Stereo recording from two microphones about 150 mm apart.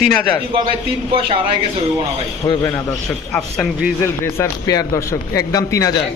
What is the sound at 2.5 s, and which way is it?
Speech, 25° left (ahead or behind).